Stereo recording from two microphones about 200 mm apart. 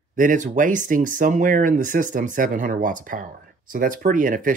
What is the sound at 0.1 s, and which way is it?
Speech, 40° right (ahead or behind).